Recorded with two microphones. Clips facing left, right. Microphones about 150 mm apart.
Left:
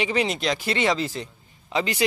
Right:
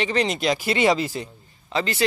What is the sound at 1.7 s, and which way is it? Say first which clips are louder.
Speech: even; 15° left (ahead or behind).